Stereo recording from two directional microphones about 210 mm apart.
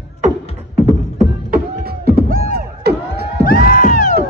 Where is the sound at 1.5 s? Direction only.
45° right (ahead or behind).